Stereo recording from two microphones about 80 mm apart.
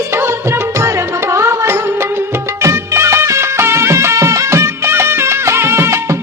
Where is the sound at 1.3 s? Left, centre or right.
Right.